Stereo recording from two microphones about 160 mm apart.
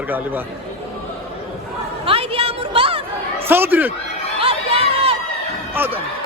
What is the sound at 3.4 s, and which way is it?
Speech, 10° right (ahead or behind).